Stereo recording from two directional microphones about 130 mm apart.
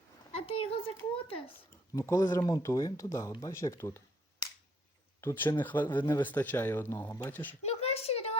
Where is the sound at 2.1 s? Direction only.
20° left (ahead or behind).